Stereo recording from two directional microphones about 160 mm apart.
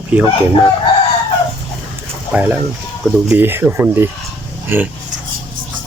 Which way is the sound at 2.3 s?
10° right (ahead or behind).